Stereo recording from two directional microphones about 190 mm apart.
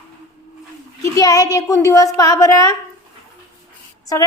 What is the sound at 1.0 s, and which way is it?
A woman's voice, 15° left (ahead or behind).